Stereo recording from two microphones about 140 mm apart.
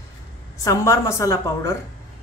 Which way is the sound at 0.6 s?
20° left (ahead or behind).